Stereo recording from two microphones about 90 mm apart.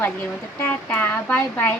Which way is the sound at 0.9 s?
20° left (ahead or behind).